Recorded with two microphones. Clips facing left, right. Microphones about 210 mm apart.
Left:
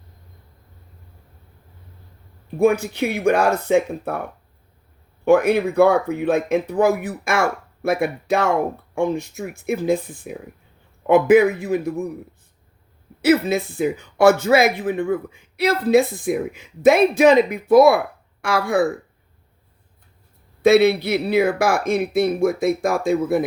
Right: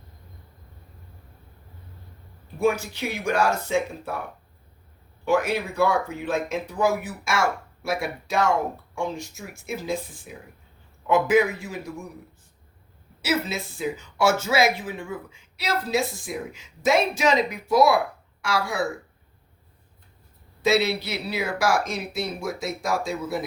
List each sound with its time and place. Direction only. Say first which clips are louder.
2.6 s speech: left 6 dB; 60° left (ahead or behind)
5.2 s speech: left 8 dB; 55° left (ahead or behind)
13.2 s speech: left 10 dB; 55° left (ahead or behind)
20.6 s speech: left 8 dB; 55° left (ahead or behind)